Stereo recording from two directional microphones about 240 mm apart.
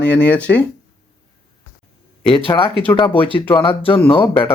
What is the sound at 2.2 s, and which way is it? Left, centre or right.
Speech, left.